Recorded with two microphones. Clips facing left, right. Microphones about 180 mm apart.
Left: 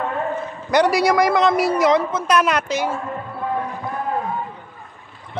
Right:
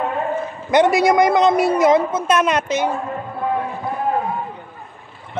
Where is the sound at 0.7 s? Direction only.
25° right (ahead or behind).